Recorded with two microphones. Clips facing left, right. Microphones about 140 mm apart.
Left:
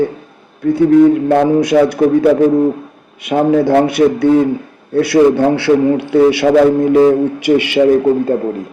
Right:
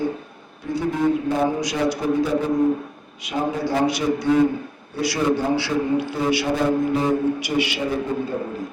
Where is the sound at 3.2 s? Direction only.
65° left (ahead or behind).